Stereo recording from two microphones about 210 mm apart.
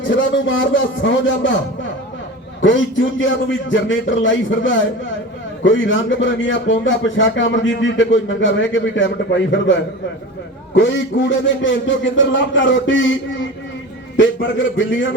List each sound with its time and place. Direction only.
0.1 s a man's voice: 60° left (ahead or behind)
2.6 s a man's voice: 60° left (ahead or behind)
14.2 s a man's voice: 65° left (ahead or behind)